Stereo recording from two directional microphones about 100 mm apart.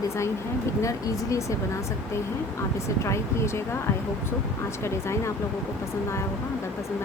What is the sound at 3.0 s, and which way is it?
Speech, 30° left (ahead or behind).